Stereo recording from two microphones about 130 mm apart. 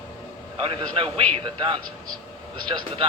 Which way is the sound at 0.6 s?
45° right (ahead or behind).